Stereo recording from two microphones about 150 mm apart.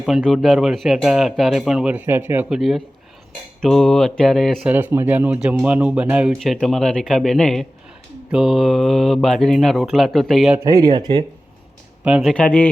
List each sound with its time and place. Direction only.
0.3 s speech: centre (ahead or behind)
4.7 s speech: 10° right (ahead or behind)
10.6 s speech: 25° right (ahead or behind)
12.0 s speech: 10° right (ahead or behind)
12.3 s speech: 10° left (ahead or behind)